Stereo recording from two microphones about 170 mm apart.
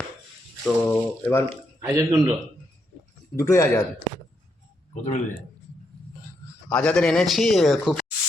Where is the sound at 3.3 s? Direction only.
15° left (ahead or behind).